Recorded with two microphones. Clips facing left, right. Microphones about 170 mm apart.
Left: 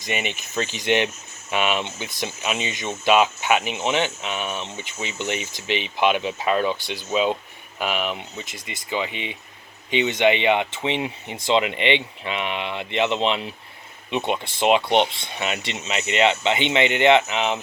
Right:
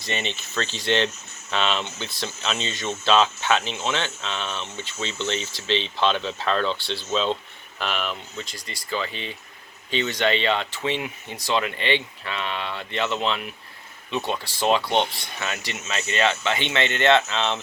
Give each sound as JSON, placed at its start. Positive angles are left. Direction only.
{"t": 0.0, "sound": "speech", "side_deg": 10}